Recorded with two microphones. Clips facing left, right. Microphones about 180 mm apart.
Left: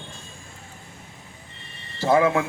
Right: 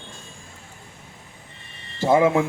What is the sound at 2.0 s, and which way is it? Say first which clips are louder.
Speech: right 2 dB; 25° right (ahead or behind).